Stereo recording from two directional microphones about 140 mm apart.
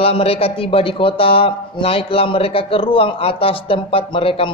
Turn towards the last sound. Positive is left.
turn(degrees=40)  # may be behind; listen again after turning